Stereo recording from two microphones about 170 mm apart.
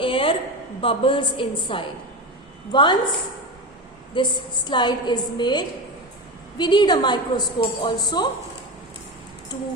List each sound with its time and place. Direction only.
0.0 s a sound: 30° left (ahead or behind)
0.8 s a woman's voice: 30° left (ahead or behind)
4.1 s a woman's voice: 30° left (ahead or behind)